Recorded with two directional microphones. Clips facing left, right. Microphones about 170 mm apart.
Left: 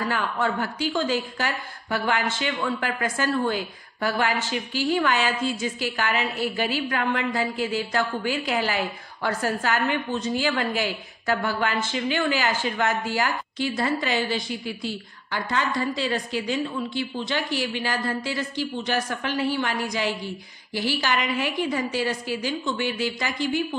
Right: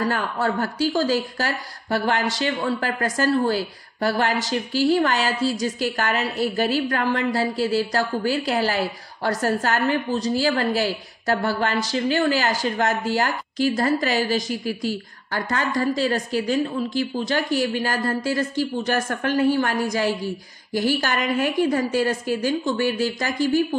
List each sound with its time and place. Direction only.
0.0 s a woman's voice: 40° right (ahead or behind)